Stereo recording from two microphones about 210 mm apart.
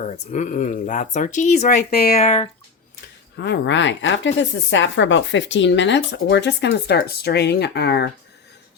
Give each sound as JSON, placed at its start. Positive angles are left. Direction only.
{"t": 0.0, "sound": "speech", "side_deg": 35}
{"t": 1.9, "sound": "speech", "side_deg": 50}
{"t": 3.3, "sound": "speech", "side_deg": 55}